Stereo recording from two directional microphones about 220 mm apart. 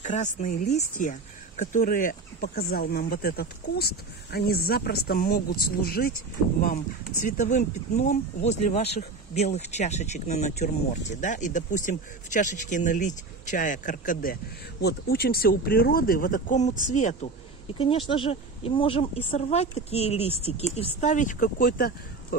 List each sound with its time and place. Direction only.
0.0 s speech: 35° left (ahead or behind)
17.7 s a woman's voice: 25° left (ahead or behind); by 21.9 s 40° left (ahead or behind)